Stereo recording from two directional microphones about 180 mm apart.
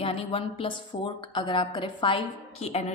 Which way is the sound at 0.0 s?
30° left (ahead or behind).